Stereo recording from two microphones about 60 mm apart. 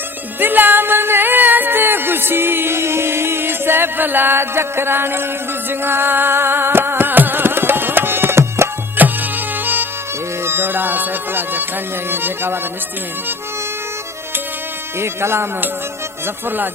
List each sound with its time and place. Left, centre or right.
0.3 s music: right
9.0 s music: right
14.9 s speech: right
16.2 s music: right